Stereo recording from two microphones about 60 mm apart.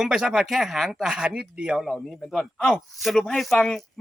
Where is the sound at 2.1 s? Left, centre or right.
Centre.